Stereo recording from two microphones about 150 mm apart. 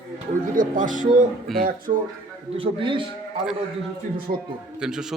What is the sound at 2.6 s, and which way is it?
Speech, 35° right (ahead or behind).